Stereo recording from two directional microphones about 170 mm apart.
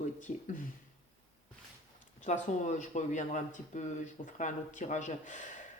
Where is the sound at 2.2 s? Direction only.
45° left (ahead or behind).